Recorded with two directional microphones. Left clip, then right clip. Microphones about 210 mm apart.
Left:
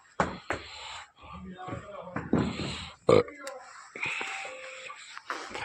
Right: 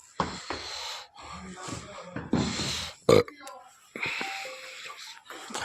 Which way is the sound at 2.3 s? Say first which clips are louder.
Right 3 dB; 25° right (ahead or behind).